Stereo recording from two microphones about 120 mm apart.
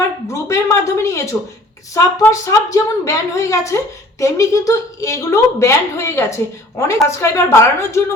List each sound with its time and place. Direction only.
0.4 s a woman's voice: 25° left (ahead or behind)